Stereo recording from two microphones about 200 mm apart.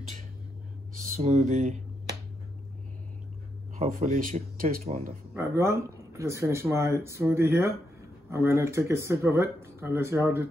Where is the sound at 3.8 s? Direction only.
40° right (ahead or behind).